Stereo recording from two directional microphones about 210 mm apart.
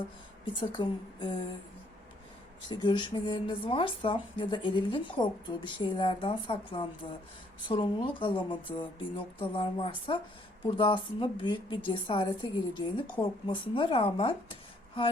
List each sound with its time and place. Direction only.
0.6 s speech: 20° left (ahead or behind)
2.6 s speech: 20° left (ahead or behind)